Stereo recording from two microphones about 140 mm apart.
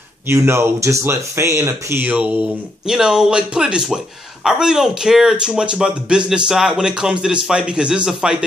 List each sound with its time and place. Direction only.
0.3 s speech: 20° right (ahead or behind)